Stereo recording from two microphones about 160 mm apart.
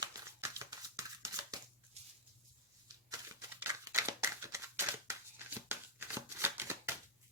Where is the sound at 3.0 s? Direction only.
20° right (ahead or behind).